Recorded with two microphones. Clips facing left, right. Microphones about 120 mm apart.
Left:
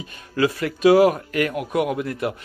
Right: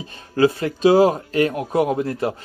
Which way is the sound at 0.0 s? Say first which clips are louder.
Right 4 dB; 30° right (ahead or behind).